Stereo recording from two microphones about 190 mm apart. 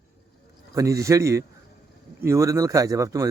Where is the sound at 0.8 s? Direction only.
15° right (ahead or behind).